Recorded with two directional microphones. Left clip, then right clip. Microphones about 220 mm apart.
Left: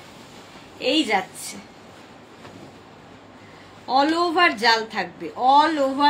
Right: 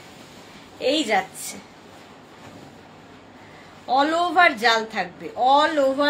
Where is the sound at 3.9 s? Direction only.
15° right (ahead or behind).